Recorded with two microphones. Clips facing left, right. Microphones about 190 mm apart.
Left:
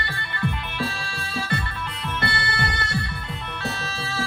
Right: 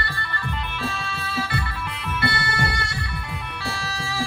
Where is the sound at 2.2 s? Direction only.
10° right (ahead or behind).